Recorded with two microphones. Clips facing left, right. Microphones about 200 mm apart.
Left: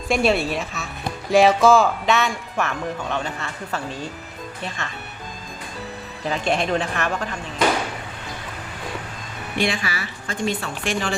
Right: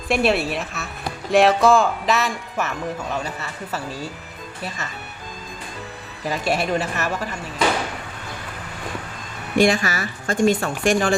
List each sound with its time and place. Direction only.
0.1 s speech: centre (ahead or behind)
6.2 s speech: 5° right (ahead or behind)
9.6 s speech: 45° right (ahead or behind)